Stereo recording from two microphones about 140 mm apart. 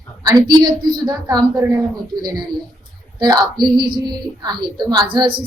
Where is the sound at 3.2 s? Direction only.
30° right (ahead or behind).